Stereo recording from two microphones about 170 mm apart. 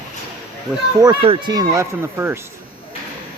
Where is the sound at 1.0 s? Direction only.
30° right (ahead or behind).